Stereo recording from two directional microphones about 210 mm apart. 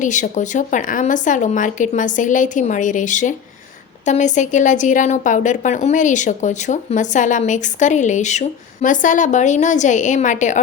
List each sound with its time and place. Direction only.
0.0 s speech: 35° left (ahead or behind)